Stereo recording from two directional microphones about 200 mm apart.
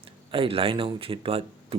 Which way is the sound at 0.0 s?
25° right (ahead or behind).